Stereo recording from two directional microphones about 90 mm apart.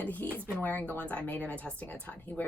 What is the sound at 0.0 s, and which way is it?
A woman's voice, 20° left (ahead or behind).